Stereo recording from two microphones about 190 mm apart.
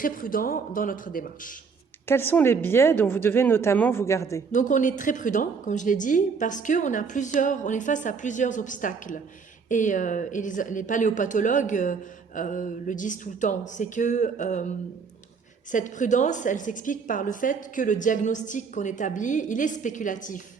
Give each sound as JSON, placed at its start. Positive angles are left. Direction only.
{"t": 0.0, "sound": "speech", "side_deg": 45}
{"t": 2.0, "sound": "speech", "side_deg": 10}
{"t": 4.5, "sound": "speech", "side_deg": 40}
{"t": 15.7, "sound": "speech", "side_deg": 40}